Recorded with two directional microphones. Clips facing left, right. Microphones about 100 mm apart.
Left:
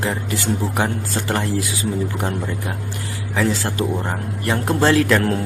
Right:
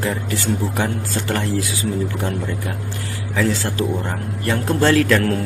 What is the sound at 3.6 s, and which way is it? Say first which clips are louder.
Speech: even; 25° left (ahead or behind).